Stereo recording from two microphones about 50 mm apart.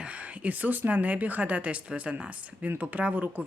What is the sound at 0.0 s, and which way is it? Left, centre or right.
Speech, right.